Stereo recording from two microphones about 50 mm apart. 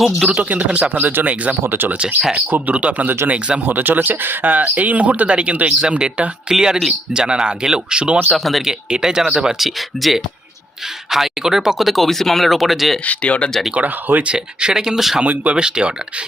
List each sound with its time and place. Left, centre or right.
0.3 s speech: right
2.0 s speech: right
3.7 s speech: right
6.5 s speech: centre
8.3 s speech: centre
8.9 s speech: centre
9.6 s speech: centre
13.1 s speech: left
13.7 s speech: right
14.3 s speech: centre
15.2 s speech: right
15.5 s speech: centre